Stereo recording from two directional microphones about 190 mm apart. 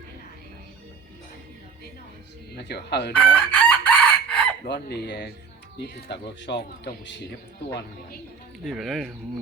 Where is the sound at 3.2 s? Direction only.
5° left (ahead or behind).